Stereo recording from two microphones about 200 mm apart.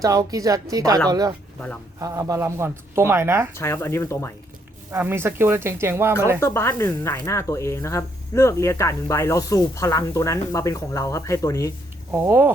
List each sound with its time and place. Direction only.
0.0 s speech: 20° right (ahead or behind)
2.0 s speech: 20° right (ahead or behind)
3.5 s speech: 10° left (ahead or behind)
4.9 s speech: 10° right (ahead or behind)
6.4 s speech: 15° left (ahead or behind)
12.1 s speech: 10° right (ahead or behind)